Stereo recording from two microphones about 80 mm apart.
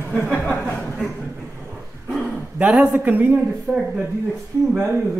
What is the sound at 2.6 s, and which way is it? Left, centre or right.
Speech, centre.